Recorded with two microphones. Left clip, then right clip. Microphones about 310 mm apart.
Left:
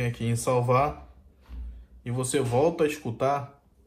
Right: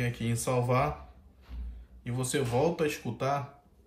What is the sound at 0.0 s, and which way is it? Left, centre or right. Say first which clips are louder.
Speech: left 4 dB; centre.